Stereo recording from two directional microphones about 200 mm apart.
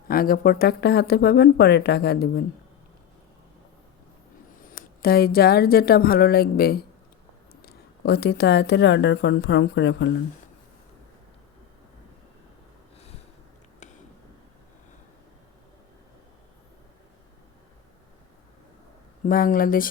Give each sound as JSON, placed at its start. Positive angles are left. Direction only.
{"t": 0.1, "sound": "speech", "side_deg": 45}
{"t": 4.6, "sound": "speech", "side_deg": 45}
{"t": 19.2, "sound": "speech", "side_deg": 45}